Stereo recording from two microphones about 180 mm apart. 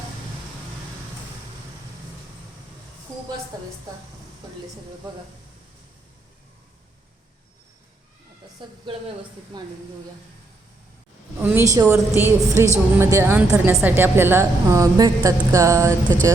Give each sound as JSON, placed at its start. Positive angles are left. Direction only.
{"t": 3.5, "sound": "speech", "side_deg": -20}
{"t": 8.6, "sound": "speech", "side_deg": -25}
{"t": 11.3, "sound": "a woman's voice", "side_deg": -10}